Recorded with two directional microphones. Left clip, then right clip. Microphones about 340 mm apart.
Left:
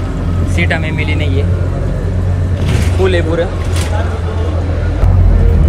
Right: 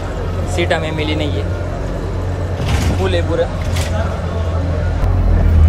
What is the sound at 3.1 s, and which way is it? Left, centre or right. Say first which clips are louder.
Speech: left 2 dB; centre.